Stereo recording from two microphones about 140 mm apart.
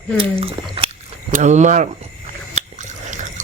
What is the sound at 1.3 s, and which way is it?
Speech, 60° right (ahead or behind).